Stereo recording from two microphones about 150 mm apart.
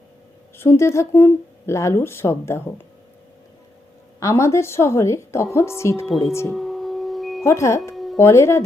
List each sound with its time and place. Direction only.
0.5 s speech: 15° left (ahead or behind)
4.2 s a woman's voice: 20° left (ahead or behind)
6.5 s a sound: centre (ahead or behind)
7.4 s speech: 20° left (ahead or behind)
7.9 s music: centre (ahead or behind)
8.2 s speech: 20° left (ahead or behind)